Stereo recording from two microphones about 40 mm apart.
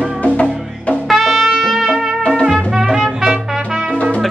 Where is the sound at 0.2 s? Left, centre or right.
Left.